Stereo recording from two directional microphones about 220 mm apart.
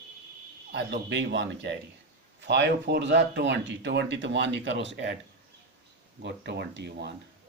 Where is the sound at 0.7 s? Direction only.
55° right (ahead or behind).